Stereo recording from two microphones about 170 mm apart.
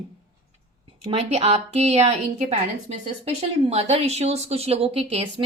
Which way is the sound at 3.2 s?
35° right (ahead or behind).